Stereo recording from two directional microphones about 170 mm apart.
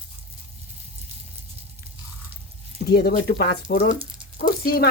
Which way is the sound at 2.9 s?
55° left (ahead or behind).